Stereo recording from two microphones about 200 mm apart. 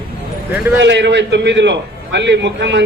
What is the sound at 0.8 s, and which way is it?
A man's voice, 60° right (ahead or behind).